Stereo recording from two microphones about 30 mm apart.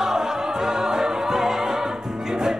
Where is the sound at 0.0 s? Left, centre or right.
Centre.